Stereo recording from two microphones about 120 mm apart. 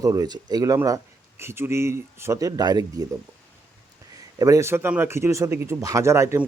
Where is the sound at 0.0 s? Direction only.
30° right (ahead or behind).